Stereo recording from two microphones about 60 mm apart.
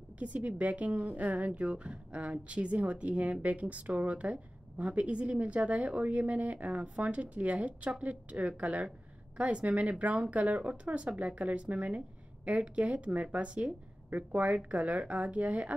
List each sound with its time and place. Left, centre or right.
0.2 s a woman's voice: right